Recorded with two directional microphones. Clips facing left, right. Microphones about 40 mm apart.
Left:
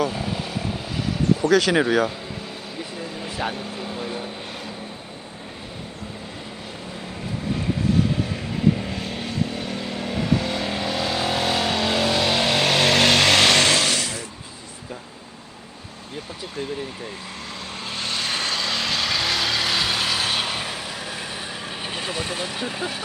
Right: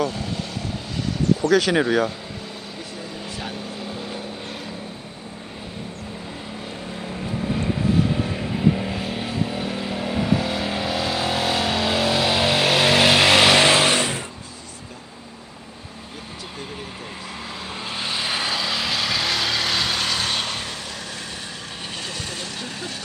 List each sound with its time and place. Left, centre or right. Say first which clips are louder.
0.0 s vehicle: left 1 dB; centre
1.4 s speech: even; centre
3.0 s vehicle: left 5 dB; centre
7.0 s vehicle: right 3 dB; centre; by 14.3 s right
17.8 s vehicle: right 1 dB; centre
21.8 s vehicle: left 4 dB; centre